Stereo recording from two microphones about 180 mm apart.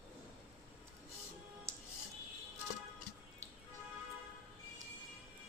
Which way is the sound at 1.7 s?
15° right (ahead or behind).